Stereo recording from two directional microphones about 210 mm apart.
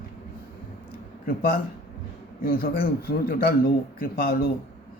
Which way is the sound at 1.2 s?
45° left (ahead or behind).